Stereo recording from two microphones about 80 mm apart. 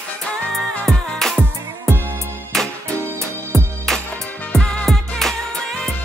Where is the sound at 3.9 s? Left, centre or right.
Centre.